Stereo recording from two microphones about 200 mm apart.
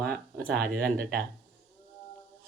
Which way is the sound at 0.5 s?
50° right (ahead or behind).